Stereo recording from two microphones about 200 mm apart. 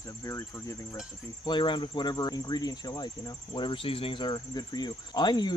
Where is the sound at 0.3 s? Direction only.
15° left (ahead or behind).